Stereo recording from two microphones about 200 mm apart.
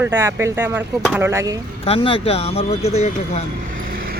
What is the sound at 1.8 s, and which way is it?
Speech, 30° left (ahead or behind).